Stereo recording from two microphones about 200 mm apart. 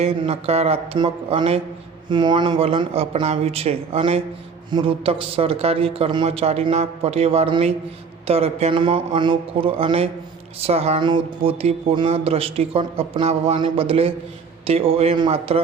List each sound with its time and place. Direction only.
0.0 s speech: 30° right (ahead or behind)